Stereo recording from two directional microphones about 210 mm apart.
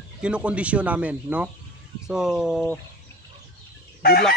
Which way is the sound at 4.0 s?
45° left (ahead or behind).